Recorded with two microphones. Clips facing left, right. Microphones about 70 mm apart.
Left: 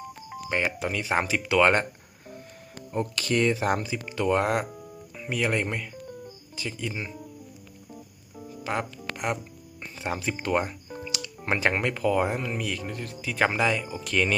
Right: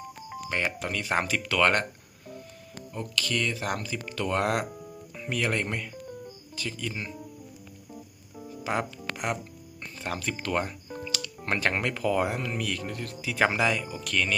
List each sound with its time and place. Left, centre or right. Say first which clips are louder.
0.3 s speech: left 2 dB; centre
2.9 s speech: left 5 dB; left; by 7.2 s centre
7.9 s music: even; centre
10.0 s speech: left 3 dB; centre